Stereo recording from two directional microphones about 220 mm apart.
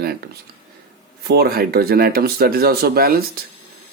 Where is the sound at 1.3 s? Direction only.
45° right (ahead or behind).